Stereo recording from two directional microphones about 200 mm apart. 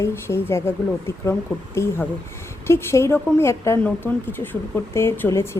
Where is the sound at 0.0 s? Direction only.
10° left (ahead or behind).